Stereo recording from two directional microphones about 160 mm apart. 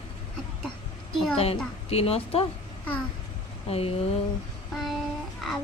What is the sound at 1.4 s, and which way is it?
A woman's voice, 40° left (ahead or behind).